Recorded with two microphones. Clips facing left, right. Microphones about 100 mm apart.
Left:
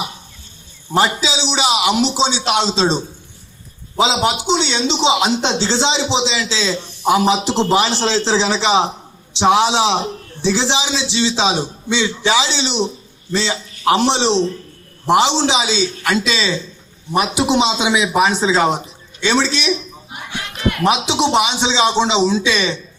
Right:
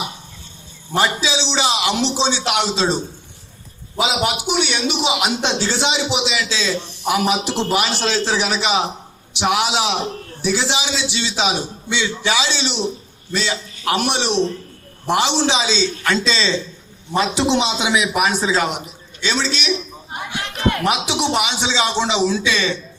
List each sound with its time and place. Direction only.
0.9 s a man's voice: 20° left (ahead or behind)
21.1 s a man's voice: 20° left (ahead or behind)